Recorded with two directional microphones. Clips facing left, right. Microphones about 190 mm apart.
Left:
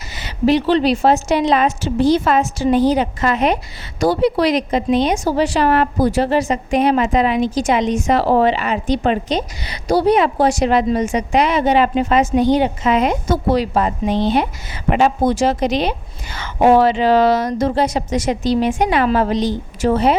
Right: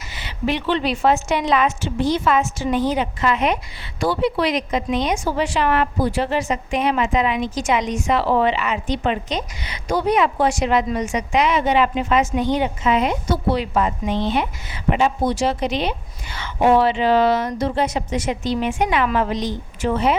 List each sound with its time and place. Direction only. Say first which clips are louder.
0.1 s a woman's voice: left 8 dB; 40° left (ahead or behind)
14.8 s speech: left 4 dB; 80° left
15.2 s a woman's voice: left 4 dB; 50° left (ahead or behind)